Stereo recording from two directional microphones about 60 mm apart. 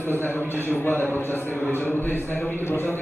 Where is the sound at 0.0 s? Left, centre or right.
Left.